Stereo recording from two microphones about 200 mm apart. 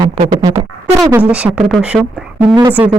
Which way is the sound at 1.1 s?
5° right (ahead or behind).